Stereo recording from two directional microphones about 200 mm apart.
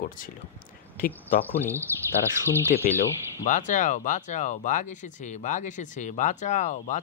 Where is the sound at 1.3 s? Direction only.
45° left (ahead or behind).